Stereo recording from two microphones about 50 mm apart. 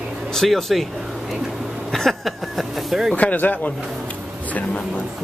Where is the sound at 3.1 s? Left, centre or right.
Left.